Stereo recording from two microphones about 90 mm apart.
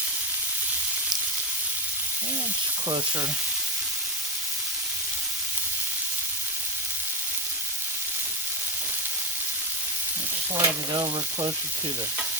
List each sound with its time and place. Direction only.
10.5 s stir: 40° right (ahead or behind)
11.0 s speech: 55° right (ahead or behind)